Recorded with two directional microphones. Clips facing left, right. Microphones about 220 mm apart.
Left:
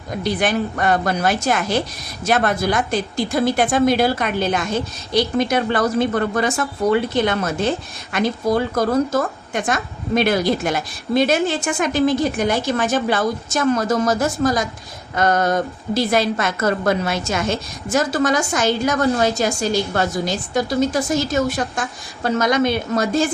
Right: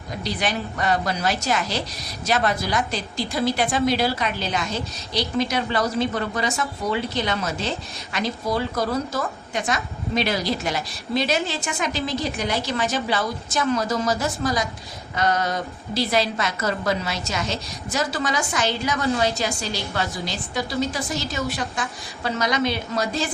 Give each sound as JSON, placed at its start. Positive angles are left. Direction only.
{"t": 0.2, "sound": "a woman's voice", "side_deg": 55}